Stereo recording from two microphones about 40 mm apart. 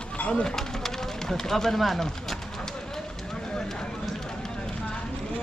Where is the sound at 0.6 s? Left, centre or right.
Centre.